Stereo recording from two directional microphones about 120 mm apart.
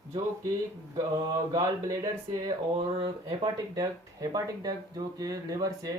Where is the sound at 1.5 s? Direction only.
30° right (ahead or behind).